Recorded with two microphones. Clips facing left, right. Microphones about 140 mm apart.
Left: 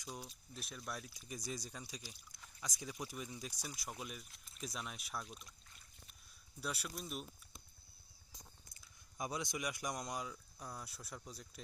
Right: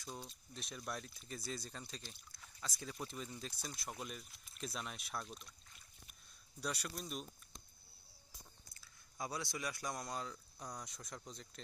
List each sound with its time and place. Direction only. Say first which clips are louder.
0.0 s speech: even; 10° left (ahead or behind)
1.1 s speech: even; 15° left (ahead or behind)
6.6 s speech: right 1 dB; 5° left (ahead or behind)
8.7 s speech: left 1 dB; 20° left (ahead or behind)